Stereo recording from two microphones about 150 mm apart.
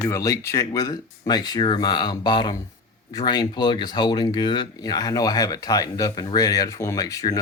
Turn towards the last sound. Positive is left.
turn(degrees=25)  # may be behind; listen again after turning